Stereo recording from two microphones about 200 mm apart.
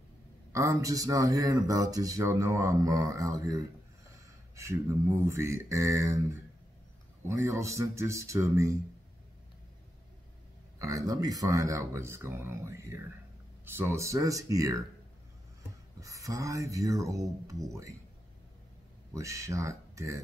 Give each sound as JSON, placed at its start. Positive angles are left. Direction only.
{"t": 0.5, "sound": "speech", "side_deg": -15}
{"t": 5.2, "sound": "speech", "side_deg": -15}
{"t": 7.2, "sound": "speech", "side_deg": -15}
{"t": 10.8, "sound": "speech", "side_deg": -15}
{"t": 16.0, "sound": "speech", "side_deg": -15}
{"t": 19.1, "sound": "speech", "side_deg": -15}